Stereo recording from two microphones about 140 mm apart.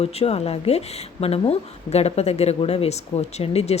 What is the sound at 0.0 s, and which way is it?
Speech, 45° left (ahead or behind).